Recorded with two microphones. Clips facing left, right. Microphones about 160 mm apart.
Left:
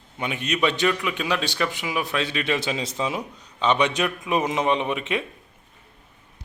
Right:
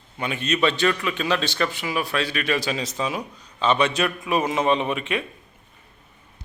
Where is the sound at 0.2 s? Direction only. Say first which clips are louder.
Right 1 dB; 15° left (ahead or behind).